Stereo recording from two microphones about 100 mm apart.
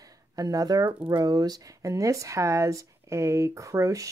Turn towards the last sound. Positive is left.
turn(degrees=-35)  # may be behind; listen again after turning